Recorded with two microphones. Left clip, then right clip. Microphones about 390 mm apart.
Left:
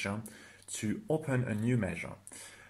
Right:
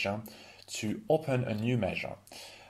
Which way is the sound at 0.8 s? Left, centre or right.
Right.